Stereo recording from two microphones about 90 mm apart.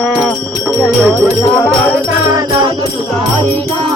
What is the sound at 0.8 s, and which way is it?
Music, centre (ahead or behind).